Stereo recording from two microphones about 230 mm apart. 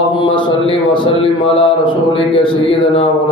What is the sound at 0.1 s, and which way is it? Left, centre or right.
A man's voice, left.